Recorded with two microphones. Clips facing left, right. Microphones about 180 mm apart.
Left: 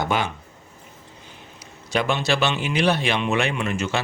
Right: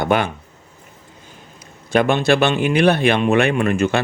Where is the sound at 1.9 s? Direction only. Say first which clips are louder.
Right 7 dB; 55° right (ahead or behind).